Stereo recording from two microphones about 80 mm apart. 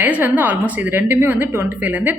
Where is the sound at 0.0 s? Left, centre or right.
Right.